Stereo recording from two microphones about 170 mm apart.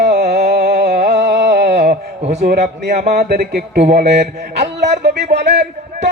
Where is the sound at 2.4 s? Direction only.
75° right (ahead or behind).